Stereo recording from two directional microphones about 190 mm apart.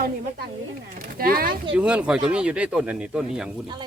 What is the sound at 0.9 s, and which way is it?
Speech, 50° right (ahead or behind).